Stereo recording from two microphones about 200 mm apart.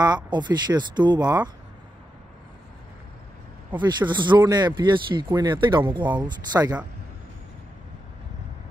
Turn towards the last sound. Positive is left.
turn(degrees=-20)  # may be behind; listen again after turning